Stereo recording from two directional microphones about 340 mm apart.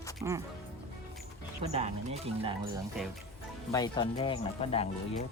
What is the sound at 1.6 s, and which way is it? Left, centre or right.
Speech, centre.